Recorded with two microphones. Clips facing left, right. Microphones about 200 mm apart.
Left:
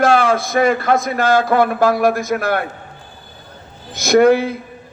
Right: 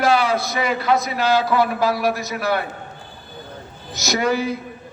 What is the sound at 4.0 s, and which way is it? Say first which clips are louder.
Speech: left 9 dB; 55° left (ahead or behind).